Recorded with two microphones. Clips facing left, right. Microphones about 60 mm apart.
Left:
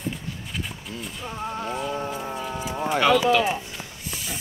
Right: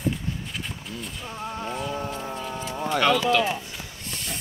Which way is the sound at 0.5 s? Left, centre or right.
Centre.